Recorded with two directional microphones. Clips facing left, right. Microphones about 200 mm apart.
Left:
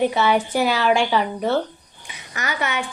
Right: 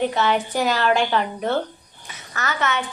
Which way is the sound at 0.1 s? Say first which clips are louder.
Left 2 dB; 15° left (ahead or behind).